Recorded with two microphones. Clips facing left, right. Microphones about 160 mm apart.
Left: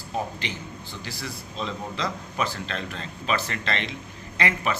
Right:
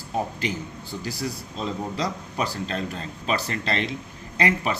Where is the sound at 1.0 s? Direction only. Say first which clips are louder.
Right 7 dB; 40° right (ahead or behind).